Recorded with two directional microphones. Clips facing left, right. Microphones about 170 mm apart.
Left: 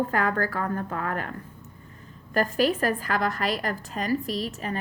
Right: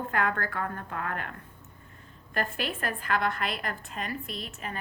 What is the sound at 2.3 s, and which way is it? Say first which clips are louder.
A woman's voice: left 9 dB; 40° left (ahead or behind).